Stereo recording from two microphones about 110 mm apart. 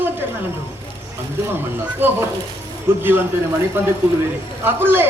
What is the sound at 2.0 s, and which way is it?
Speech, 20° right (ahead or behind).